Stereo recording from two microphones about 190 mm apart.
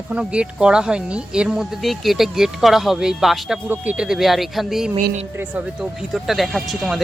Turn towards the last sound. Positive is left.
turn(degrees=0)  # may be behind; listen again after turning